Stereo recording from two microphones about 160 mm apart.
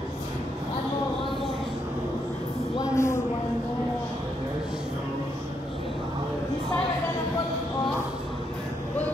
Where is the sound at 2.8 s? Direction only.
15° left (ahead or behind).